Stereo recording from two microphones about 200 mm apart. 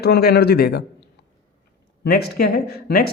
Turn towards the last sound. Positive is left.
turn(degrees=45)  # may be behind; listen again after turning